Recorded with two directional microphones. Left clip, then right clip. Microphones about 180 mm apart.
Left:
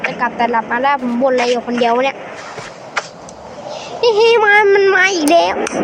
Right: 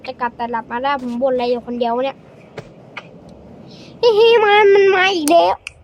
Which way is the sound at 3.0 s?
55° left (ahead or behind).